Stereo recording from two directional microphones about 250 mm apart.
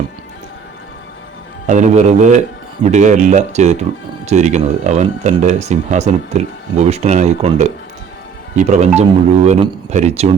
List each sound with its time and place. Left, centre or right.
1.6 s speech: right